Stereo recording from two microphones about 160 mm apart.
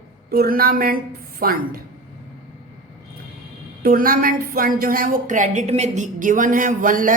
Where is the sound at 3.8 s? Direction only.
65° right (ahead or behind).